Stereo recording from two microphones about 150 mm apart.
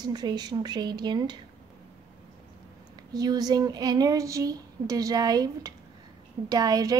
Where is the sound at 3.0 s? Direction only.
25° right (ahead or behind).